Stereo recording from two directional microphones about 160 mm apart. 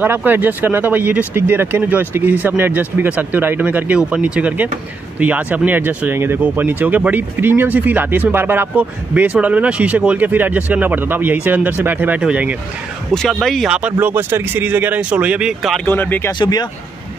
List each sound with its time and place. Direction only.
0.0 s speech: 10° right (ahead or behind)
15.8 s speech: 10° left (ahead or behind)
16.3 s speech: 25° left (ahead or behind)